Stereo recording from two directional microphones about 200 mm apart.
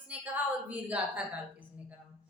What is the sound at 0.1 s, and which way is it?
A woman's voice, 5° right (ahead or behind).